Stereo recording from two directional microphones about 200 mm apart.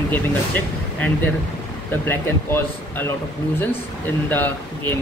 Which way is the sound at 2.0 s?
10° left (ahead or behind).